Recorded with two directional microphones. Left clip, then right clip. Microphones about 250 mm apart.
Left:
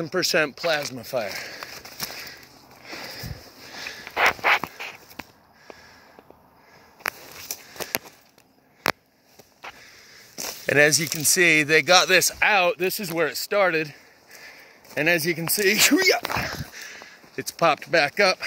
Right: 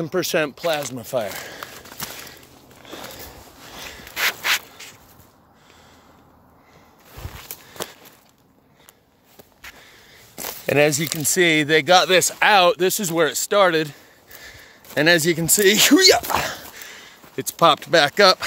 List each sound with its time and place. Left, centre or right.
0.0 s speech: centre
10.7 s speech: centre
12.4 s speech: right
16.6 s a sound: centre